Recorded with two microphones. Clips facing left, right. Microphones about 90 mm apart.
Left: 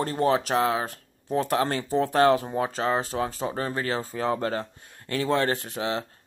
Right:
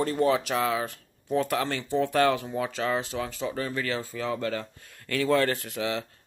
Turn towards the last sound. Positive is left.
turn(degrees=35)  # may be behind; listen again after turning